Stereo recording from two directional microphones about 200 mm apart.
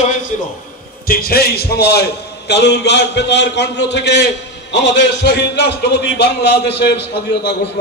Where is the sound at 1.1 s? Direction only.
50° left (ahead or behind).